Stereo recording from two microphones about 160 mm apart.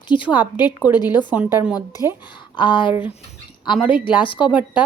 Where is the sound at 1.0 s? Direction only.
25° left (ahead or behind).